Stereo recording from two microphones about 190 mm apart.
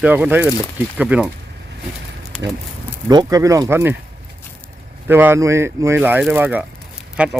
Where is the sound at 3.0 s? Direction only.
20° right (ahead or behind).